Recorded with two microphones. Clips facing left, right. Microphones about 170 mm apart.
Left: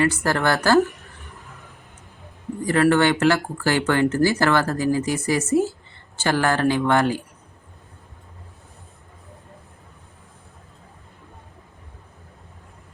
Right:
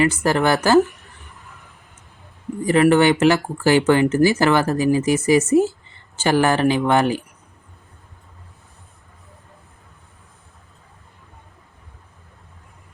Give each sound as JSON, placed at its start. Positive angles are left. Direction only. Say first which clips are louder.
{"t": 0.0, "sound": "speech", "louder": "right 3 dB", "side_deg": -20}
{"t": 2.6, "sound": "speech", "louder": "right 3 dB", "side_deg": -15}